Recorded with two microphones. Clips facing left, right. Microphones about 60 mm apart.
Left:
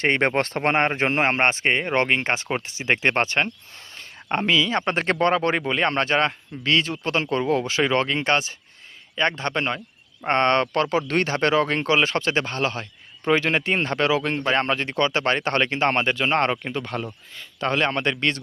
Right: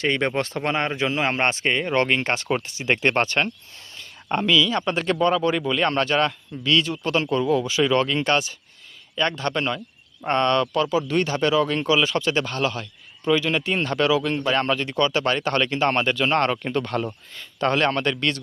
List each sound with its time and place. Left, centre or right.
0.0 s a man's voice: left
10.2 s speech: left
16.6 s speech: centre
17.9 s a man's voice: left